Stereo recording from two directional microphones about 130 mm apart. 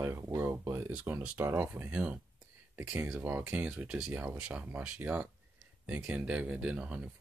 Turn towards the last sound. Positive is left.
turn(degrees=-10)  # may be behind; listen again after turning